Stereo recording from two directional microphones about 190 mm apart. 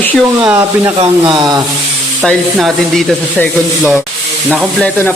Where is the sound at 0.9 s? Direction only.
25° right (ahead or behind).